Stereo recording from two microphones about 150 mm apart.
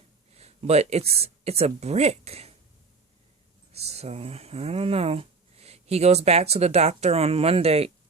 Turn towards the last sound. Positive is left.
turn(degrees=-40)  # may be behind; listen again after turning